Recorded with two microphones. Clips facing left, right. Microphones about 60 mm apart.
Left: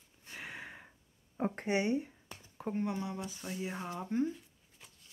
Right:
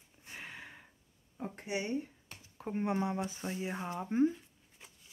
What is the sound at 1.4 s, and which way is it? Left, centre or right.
Speech, left.